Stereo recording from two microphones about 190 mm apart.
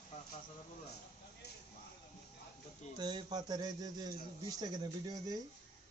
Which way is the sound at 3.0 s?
20° right (ahead or behind).